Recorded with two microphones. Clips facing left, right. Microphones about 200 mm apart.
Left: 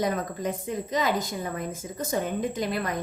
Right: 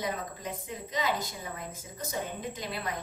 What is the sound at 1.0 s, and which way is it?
A woman's voice, 55° left (ahead or behind).